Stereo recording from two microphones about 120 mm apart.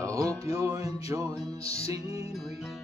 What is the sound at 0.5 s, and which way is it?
Music, 25° right (ahead or behind).